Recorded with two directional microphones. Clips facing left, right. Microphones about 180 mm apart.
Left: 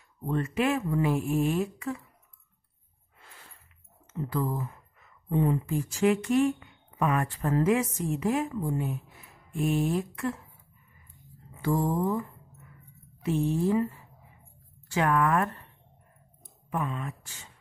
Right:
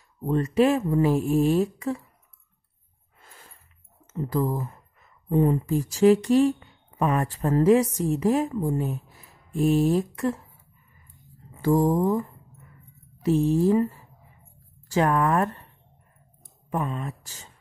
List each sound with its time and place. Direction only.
0.3 s speech: 35° right (ahead or behind)
3.2 s a sound: 40° right (ahead or behind)
4.1 s speech: 40° right (ahead or behind)
11.6 s speech: 35° right (ahead or behind)
16.7 s speech: 35° right (ahead or behind)